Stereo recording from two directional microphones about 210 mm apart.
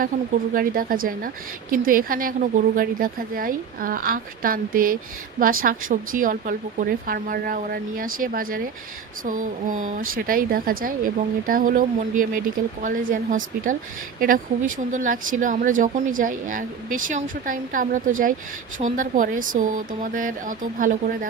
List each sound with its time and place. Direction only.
0.0 s a woman's voice: 40° right (ahead or behind)